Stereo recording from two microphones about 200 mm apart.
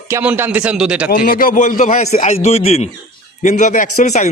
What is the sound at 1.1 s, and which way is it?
A man's voice, 45° left (ahead or behind).